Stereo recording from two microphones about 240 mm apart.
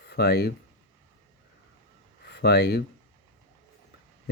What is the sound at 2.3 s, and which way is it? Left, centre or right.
Speech, left.